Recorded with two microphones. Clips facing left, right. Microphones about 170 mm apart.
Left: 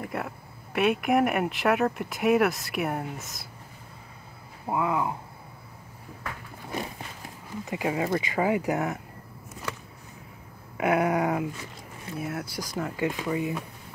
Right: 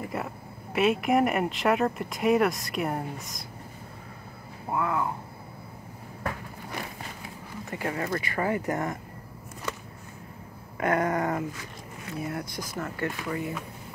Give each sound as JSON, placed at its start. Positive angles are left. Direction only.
{"t": 0.0, "sound": "speech", "side_deg": 0}
{"t": 4.6, "sound": "speech", "side_deg": 15}
{"t": 7.7, "sound": "speech", "side_deg": 15}
{"t": 10.8, "sound": "speech", "side_deg": 10}